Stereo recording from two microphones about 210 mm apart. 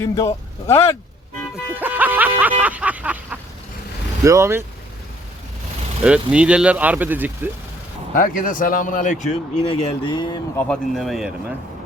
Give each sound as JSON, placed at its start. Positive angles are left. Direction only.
{"t": 0.7, "sound": "speech", "side_deg": 10}
{"t": 1.7, "sound": "vehicle", "side_deg": -10}
{"t": 4.2, "sound": "speech", "side_deg": -15}
{"t": 6.0, "sound": "speech", "side_deg": -5}
{"t": 8.1, "sound": "a man's voice", "side_deg": 40}
{"t": 10.6, "sound": "speech", "side_deg": 0}